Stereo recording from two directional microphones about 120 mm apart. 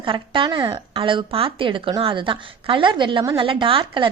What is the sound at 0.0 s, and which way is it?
A woman's voice, 45° right (ahead or behind).